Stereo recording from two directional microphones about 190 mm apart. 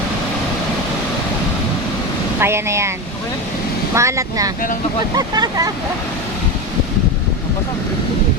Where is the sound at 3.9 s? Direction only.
15° right (ahead or behind).